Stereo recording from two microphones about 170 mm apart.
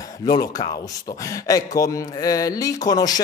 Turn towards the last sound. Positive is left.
turn(degrees=20)  # may be behind; listen again after turning